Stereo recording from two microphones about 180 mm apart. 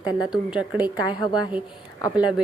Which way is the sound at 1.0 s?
25° left (ahead or behind).